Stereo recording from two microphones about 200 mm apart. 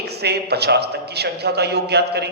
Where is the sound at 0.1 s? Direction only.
55° right (ahead or behind).